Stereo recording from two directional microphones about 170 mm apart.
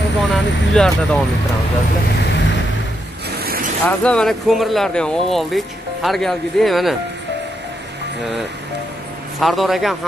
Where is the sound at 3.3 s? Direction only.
65° right (ahead or behind).